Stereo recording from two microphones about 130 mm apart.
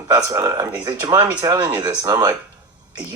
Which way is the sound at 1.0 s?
25° right (ahead or behind).